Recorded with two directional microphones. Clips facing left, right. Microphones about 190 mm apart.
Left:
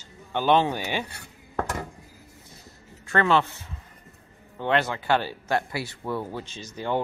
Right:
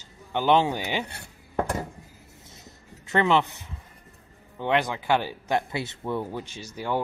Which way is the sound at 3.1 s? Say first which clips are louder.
Even; 15° right (ahead or behind).